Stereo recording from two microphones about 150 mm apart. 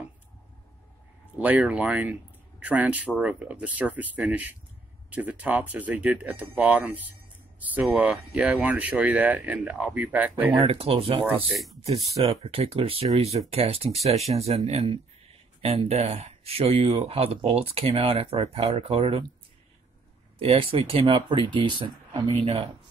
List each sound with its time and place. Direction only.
1.4 s speech: 10° right (ahead or behind)
10.6 s speech: 40° right (ahead or behind)
11.5 s speech: centre (ahead or behind)
12.3 s speech: 40° right (ahead or behind)
20.3 s speech: 40° right (ahead or behind)